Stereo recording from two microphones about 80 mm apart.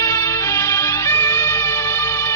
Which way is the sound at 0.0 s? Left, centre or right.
Left.